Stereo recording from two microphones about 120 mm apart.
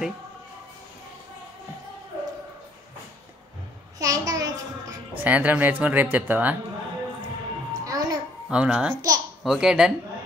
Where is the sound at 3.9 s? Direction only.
30° right (ahead or behind).